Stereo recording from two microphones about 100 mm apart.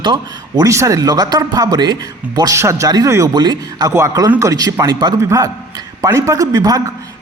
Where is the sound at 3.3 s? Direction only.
45° right (ahead or behind).